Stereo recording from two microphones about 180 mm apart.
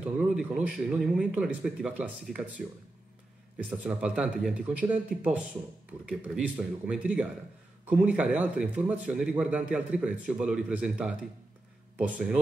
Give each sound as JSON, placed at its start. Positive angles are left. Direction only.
{"t": 0.0, "sound": "a man's voice", "side_deg": -5}